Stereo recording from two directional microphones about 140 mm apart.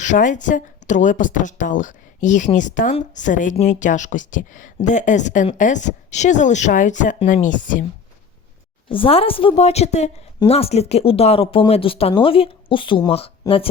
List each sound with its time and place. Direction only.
0.0 s speech: 65° left (ahead or behind)
3.5 s speech: 55° left (ahead or behind)
8.9 s a woman's voice: 40° left (ahead or behind)
9.6 s speech: 50° left (ahead or behind)